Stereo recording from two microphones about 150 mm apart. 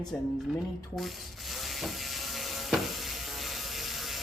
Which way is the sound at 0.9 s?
Centre (ahead or behind).